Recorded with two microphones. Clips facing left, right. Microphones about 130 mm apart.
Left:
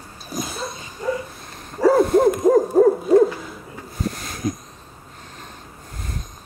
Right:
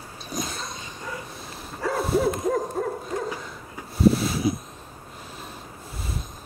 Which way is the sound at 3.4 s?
5° right (ahead or behind).